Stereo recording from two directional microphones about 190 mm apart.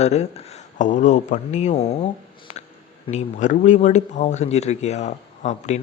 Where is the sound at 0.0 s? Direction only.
35° left (ahead or behind).